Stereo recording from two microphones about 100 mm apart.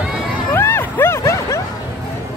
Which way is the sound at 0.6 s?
25° left (ahead or behind).